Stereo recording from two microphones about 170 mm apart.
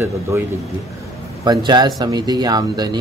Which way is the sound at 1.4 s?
25° right (ahead or behind).